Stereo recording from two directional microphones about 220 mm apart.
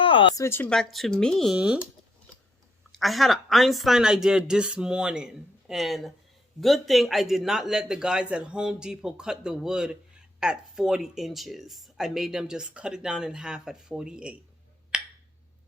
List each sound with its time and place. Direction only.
0.0 s speech: 25° left (ahead or behind)
0.4 s speech: 10° left (ahead or behind)
3.0 s speech: centre (ahead or behind)
14.9 s a sound: 5° right (ahead or behind)